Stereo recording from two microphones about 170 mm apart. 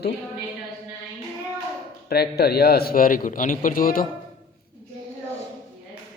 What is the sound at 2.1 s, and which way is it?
A man's voice, 70° left (ahead or behind).